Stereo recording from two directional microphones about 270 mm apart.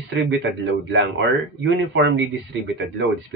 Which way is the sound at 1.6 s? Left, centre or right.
Right.